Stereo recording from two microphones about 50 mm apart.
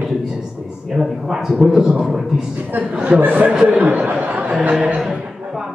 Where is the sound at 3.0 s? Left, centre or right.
Right.